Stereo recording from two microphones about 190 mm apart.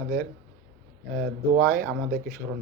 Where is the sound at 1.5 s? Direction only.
55° right (ahead or behind).